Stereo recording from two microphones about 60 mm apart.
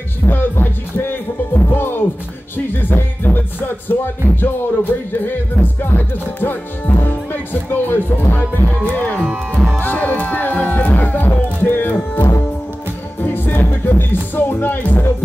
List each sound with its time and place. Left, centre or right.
0.3 s speech: left
2.5 s music: left
7.7 s music: left
9.2 s music: right
9.8 s music: left